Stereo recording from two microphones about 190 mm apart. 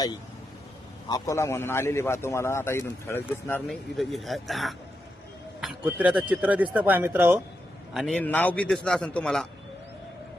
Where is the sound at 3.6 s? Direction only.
Centre (ahead or behind).